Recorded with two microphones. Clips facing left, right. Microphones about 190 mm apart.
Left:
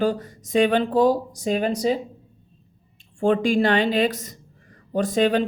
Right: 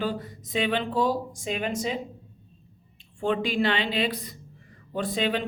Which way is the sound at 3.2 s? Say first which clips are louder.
Left 6 dB; 45° left (ahead or behind).